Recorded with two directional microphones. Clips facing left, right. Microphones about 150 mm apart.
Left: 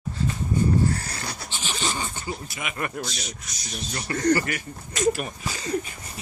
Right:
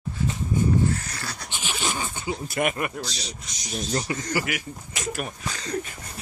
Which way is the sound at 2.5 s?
50° right (ahead or behind).